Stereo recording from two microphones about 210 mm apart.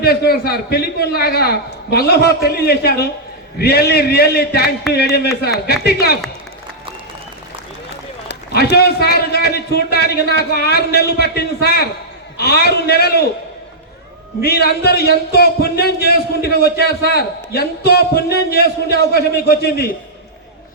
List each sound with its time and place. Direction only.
0.0 s a man's voice: 50° left (ahead or behind)
8.3 s a man's voice: 50° left (ahead or behind)
14.4 s a man's voice: 50° left (ahead or behind)